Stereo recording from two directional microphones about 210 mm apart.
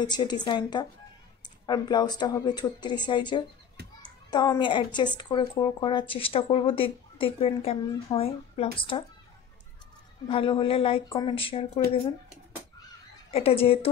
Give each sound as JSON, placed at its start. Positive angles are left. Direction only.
{"t": 0.0, "sound": "a child's voice", "side_deg": 20}
{"t": 10.2, "sound": "a child's voice", "side_deg": 25}
{"t": 13.3, "sound": "a child's voice", "side_deg": 30}